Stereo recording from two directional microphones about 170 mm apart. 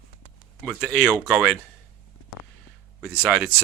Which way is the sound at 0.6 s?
Centre (ahead or behind).